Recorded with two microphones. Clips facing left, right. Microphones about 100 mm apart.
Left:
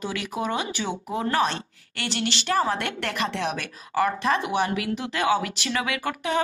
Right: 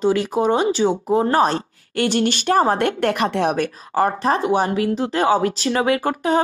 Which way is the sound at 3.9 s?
35° right (ahead or behind).